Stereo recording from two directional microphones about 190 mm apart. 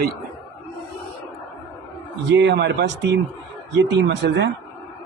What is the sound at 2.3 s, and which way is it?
Speech, 65° right (ahead or behind).